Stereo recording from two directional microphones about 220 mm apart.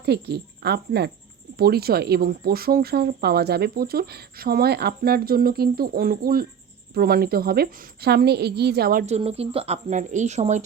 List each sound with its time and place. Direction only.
0.0 s a woman's voice: 50° right (ahead or behind); by 10.6 s 30° right (ahead or behind)